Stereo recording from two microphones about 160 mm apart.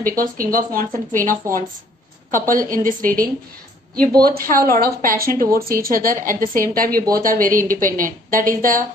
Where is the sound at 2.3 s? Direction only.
60° right (ahead or behind).